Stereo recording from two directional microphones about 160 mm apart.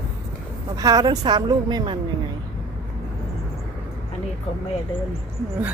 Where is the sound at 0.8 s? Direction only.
25° right (ahead or behind).